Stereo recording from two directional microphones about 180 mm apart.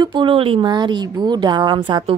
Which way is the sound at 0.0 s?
25° right (ahead or behind).